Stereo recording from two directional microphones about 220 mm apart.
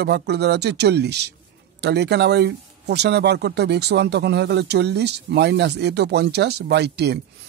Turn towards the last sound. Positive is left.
turn(degrees=-50)  # may be behind; listen again after turning